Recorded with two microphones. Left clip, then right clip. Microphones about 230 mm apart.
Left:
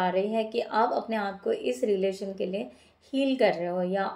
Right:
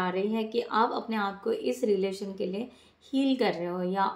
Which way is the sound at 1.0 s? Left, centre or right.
Centre.